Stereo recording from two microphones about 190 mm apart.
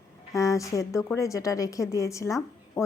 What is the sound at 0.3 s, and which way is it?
A woman's voice, 15° left (ahead or behind).